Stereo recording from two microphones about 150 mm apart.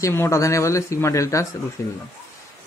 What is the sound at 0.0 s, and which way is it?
A man's voice, 20° left (ahead or behind).